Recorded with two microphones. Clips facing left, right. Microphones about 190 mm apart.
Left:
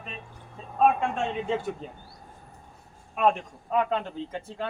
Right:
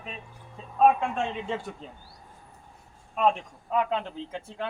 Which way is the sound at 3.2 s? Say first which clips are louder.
Left 1 dB; centre (ahead or behind).